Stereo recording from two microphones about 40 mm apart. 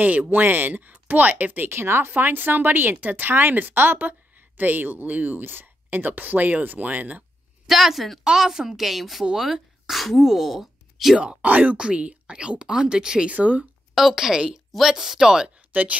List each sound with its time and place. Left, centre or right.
0.0 s speech: right
1.7 s speech: right
2.0 s a woman's voice: right
3.0 s speech: right
4.6 s speech: right
5.4 s speech: right
7.6 s a woman's voice: centre
11.4 s speech: right
11.7 s speech: right
13.3 s speech: right
13.9 s a woman's voice: centre
15.7 s speech: right